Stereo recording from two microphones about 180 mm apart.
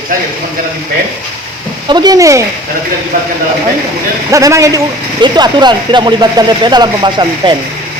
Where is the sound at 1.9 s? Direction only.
25° right (ahead or behind).